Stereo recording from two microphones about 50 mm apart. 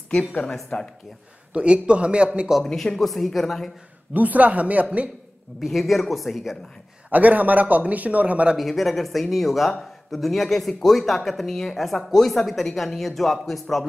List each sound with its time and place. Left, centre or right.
0.7 s speech: left
1.5 s a man's voice: right
2.6 s speech: centre
4.1 s a man's voice: right
5.6 s speech: centre
7.1 s a man's voice: right
8.5 s speech: centre